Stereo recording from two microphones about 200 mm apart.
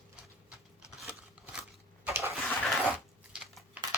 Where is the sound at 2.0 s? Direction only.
10° right (ahead or behind).